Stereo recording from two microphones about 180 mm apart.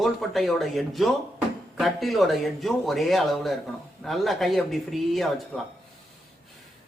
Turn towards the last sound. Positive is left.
turn(degrees=0)  # may be behind; listen again after turning